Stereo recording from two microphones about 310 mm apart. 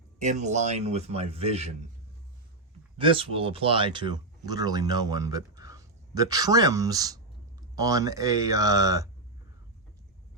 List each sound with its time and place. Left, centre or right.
0.2 s a man's voice: right
3.0 s speech: centre